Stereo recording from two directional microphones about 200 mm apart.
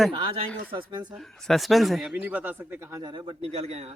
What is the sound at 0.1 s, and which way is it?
Speech, 25° right (ahead or behind).